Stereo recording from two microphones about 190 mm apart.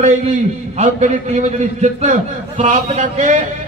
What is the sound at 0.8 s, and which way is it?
A man's voice, 40° right (ahead or behind).